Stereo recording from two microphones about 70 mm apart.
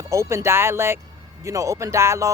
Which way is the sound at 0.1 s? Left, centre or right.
Right.